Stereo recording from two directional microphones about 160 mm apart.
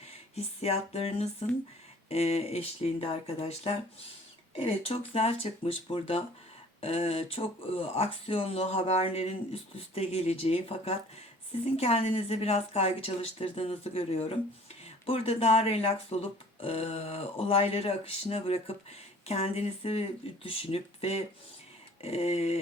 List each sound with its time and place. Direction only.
0.3 s speech: 40° left (ahead or behind)